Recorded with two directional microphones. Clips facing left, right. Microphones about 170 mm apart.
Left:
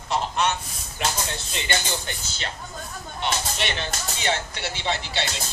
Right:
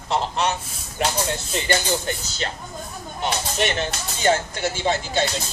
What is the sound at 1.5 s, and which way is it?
Speech, 40° right (ahead or behind).